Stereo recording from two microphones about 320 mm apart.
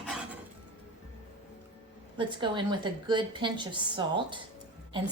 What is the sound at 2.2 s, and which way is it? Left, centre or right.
A woman's voice, centre.